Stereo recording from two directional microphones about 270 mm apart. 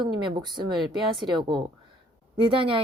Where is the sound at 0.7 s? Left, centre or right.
Centre.